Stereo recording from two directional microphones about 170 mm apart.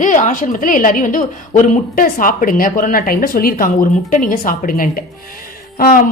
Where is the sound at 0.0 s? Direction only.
50° left (ahead or behind).